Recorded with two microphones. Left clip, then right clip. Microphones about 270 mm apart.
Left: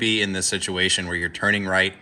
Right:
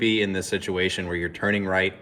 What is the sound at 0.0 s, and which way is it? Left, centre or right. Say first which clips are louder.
Speech: left 1 dB; centre.